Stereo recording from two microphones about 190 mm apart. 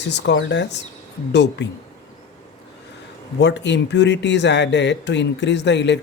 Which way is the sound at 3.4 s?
65° left (ahead or behind).